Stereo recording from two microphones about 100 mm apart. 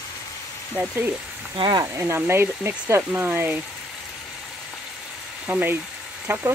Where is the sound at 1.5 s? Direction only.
55° right (ahead or behind).